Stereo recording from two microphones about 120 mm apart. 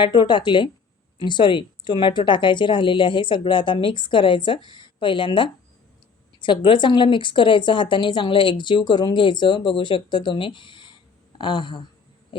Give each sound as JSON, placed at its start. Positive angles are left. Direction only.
{"t": 0.0, "sound": "speech", "side_deg": 40}